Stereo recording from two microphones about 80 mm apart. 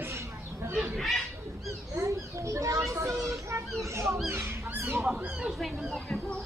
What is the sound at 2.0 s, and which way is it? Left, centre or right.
Children playing, right.